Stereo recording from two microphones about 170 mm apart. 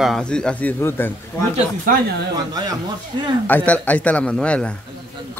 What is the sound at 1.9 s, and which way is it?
Speech, 55° right (ahead or behind).